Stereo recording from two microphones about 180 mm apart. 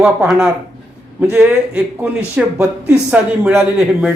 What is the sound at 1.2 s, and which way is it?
Speech, 10° right (ahead or behind).